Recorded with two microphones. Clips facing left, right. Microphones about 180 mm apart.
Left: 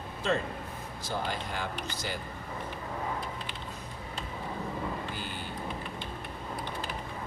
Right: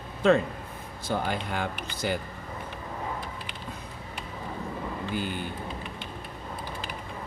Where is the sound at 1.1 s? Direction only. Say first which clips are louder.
Right 5 dB; 55° right (ahead or behind).